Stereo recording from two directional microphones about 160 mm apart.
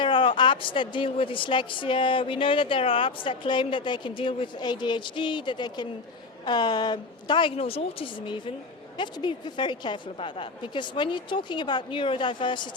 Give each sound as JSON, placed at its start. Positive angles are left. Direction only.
{"t": 0.0, "sound": "a woman's voice", "side_deg": 30}